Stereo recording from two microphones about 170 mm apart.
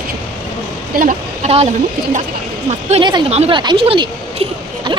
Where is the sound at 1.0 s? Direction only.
45° right (ahead or behind).